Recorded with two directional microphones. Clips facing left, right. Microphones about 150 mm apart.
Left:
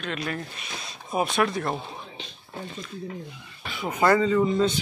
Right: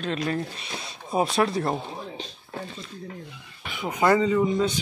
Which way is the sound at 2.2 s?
40° right (ahead or behind).